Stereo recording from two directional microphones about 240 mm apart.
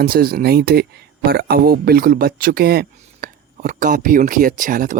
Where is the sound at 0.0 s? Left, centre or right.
Right.